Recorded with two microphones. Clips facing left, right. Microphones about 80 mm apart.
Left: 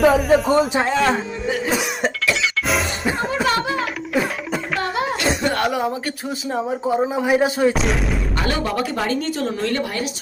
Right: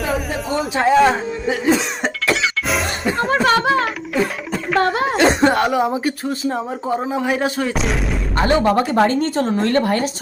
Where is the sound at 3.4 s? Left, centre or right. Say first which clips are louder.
Right 5 dB; right.